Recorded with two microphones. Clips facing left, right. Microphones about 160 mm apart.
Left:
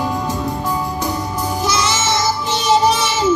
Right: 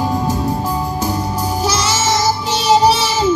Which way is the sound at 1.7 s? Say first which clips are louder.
Right 1 dB; 40° right (ahead or behind).